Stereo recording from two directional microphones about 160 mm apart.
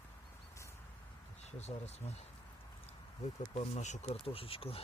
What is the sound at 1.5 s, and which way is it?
Speech, 45° left (ahead or behind).